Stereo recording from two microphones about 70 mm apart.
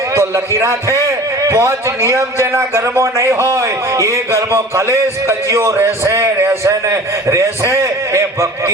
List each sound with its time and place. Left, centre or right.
0.1 s a man's voice: right